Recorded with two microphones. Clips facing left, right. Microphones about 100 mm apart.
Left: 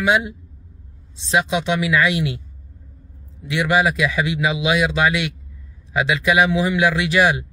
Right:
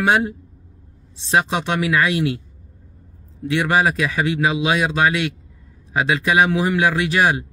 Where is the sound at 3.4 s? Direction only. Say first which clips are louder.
Even; 40° right (ahead or behind).